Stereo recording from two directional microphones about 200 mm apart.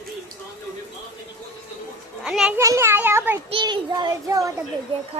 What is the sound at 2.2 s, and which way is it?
A child's voice, 5° right (ahead or behind).